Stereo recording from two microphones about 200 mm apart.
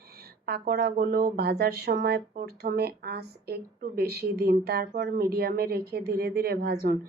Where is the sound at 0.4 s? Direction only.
50° right (ahead or behind).